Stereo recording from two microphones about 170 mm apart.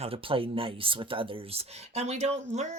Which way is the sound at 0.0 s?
30° right (ahead or behind).